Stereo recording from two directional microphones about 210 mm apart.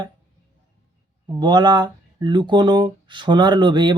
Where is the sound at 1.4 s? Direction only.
20° right (ahead or behind).